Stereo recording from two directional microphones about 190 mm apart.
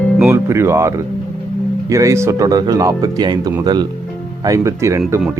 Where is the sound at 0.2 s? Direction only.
10° right (ahead or behind).